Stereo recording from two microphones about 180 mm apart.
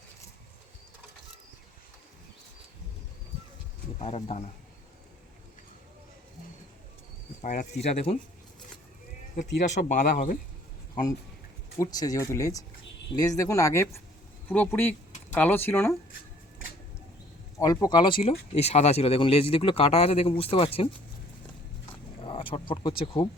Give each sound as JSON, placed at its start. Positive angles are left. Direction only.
{"t": 4.0, "sound": "speech", "side_deg": 35}
{"t": 7.4, "sound": "speech", "side_deg": 40}
{"t": 9.6, "sound": "speech", "side_deg": 40}
{"t": 11.8, "sound": "speech", "side_deg": 20}
{"t": 17.6, "sound": "speech", "side_deg": 20}
{"t": 22.2, "sound": "speech", "side_deg": 30}